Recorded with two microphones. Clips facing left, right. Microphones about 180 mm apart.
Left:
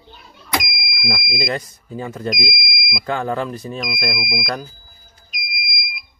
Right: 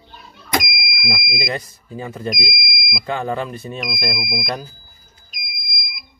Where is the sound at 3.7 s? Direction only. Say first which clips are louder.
Right 1 dB; 20° right (ahead or behind).